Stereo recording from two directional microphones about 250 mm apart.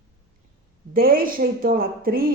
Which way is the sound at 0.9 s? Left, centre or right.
Right.